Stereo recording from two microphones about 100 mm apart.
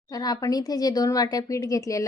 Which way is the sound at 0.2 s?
40° left (ahead or behind).